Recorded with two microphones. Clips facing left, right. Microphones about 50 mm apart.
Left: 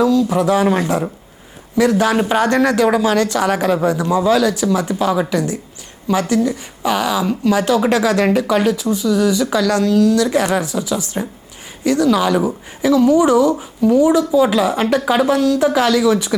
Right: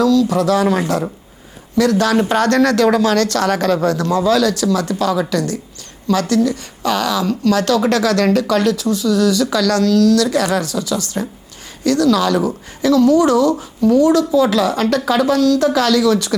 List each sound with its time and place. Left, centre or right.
0.0 s speech: centre